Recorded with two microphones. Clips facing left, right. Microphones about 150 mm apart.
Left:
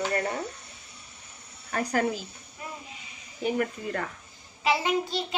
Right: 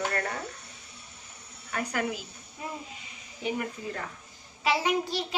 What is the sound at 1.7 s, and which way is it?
Speech, 40° left (ahead or behind).